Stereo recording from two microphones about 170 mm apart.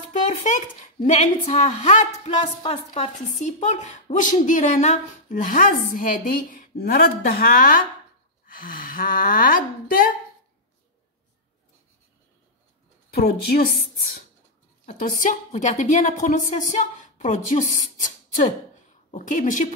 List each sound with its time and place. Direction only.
0.4 s a woman's voice: 45° left (ahead or behind)
2.6 s a woman's voice: 30° left (ahead or behind); by 10.1 s 55° left (ahead or behind)
13.1 s a woman's voice: 70° left (ahead or behind)
15.0 s a woman's voice: 50° left (ahead or behind)
19.1 s a woman's voice: 50° left (ahead or behind)